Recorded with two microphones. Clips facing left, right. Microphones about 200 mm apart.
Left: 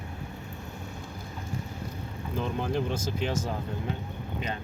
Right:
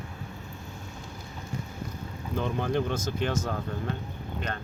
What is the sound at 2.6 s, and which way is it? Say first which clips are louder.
Speech: right 1 dB; 5° left (ahead or behind).